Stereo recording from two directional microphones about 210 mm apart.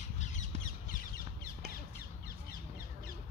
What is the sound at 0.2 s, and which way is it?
Squawk, 35° left (ahead or behind).